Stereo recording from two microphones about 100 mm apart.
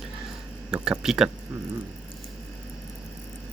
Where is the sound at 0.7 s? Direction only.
5° right (ahead or behind).